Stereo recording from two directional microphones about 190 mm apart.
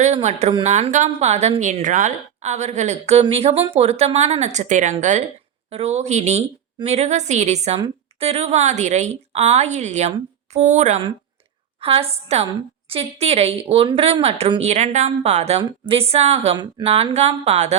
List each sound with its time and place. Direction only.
0.0 s speech: 35° right (ahead or behind)